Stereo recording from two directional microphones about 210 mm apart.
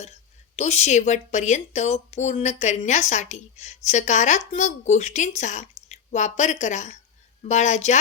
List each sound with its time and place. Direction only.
0.5 s speech: 30° left (ahead or behind)